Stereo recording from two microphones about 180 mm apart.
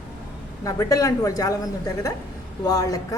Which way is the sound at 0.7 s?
20° left (ahead or behind).